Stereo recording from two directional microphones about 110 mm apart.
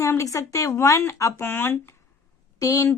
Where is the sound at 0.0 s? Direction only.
30° left (ahead or behind).